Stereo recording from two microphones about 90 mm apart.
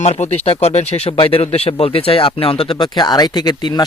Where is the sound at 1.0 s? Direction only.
90° left.